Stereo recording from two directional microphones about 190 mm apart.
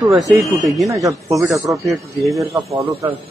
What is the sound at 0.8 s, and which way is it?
Speech, 15° right (ahead or behind).